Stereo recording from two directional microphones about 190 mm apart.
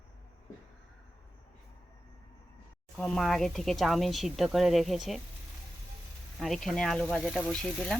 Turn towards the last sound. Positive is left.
turn(degrees=0)  # may be behind; listen again after turning